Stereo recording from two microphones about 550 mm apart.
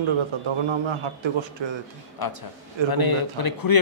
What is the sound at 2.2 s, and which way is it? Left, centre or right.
Speech, left.